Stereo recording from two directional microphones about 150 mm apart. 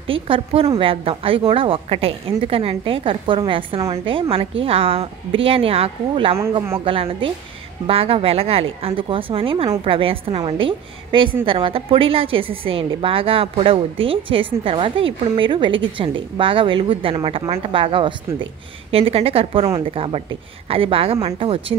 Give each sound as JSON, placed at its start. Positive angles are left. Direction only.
{"t": 0.1, "sound": "a woman's voice", "side_deg": -35}